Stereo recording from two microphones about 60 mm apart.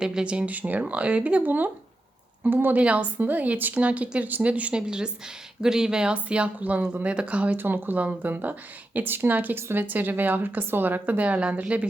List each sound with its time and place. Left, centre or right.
0.0 s a woman's voice: centre
7.6 s speech: right